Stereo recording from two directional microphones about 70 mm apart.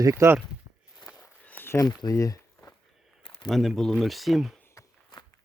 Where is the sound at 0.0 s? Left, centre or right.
Right.